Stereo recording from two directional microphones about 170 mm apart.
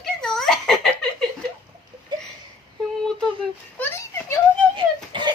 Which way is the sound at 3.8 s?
15° left (ahead or behind).